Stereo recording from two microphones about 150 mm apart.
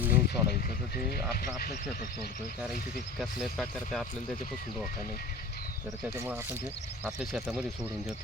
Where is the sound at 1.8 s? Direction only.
75° left (ahead or behind).